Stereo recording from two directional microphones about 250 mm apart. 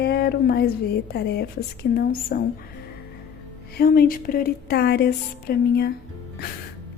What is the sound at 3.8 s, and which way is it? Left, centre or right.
Speech, left.